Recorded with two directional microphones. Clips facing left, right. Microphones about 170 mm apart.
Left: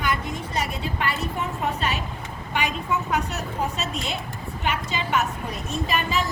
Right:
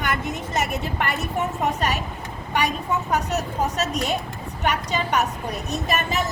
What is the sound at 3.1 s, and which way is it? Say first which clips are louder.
A woman's voice: right 3 dB; 40° right (ahead or behind).